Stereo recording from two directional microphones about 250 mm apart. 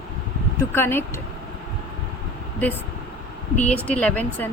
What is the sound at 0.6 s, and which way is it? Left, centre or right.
Speech, centre.